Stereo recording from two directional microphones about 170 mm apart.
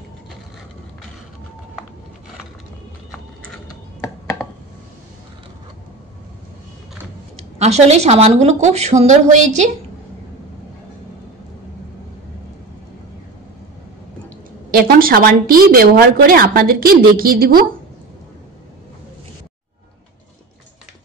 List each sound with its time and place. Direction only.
7.5 s a woman's voice: 40° right (ahead or behind)
14.7 s a woman's voice: 60° right (ahead or behind)